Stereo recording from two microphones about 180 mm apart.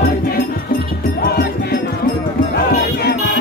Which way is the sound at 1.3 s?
60° left (ahead or behind).